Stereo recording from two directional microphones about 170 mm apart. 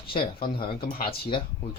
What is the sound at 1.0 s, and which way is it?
Speech, 30° left (ahead or behind).